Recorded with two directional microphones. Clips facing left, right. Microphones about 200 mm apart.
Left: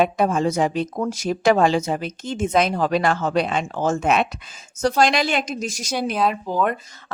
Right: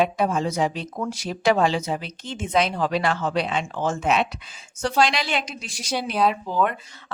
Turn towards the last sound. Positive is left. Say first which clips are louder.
# even
turn(degrees=45)  # may be behind; listen again after turning